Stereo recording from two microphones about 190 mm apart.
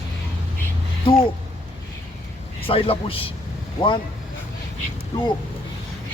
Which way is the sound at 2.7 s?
30° left (ahead or behind).